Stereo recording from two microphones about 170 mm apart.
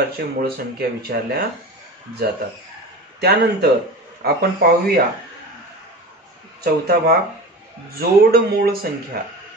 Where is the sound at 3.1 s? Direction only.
65° right (ahead or behind).